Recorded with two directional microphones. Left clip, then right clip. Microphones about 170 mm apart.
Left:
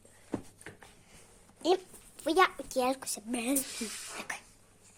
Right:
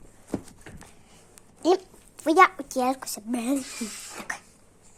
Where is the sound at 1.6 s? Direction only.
5° right (ahead or behind).